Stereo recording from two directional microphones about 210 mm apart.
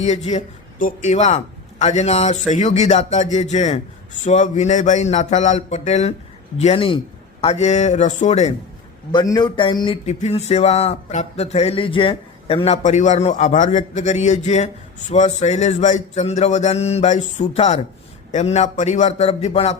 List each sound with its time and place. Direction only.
0.0 s speech: 30° left (ahead or behind)
9.1 s speech: 20° left (ahead or behind)